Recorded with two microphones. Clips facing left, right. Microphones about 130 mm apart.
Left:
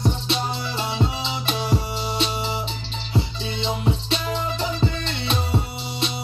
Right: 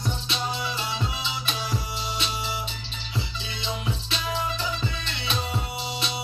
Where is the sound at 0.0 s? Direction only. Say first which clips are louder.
Left 6 dB; 35° left (ahead or behind).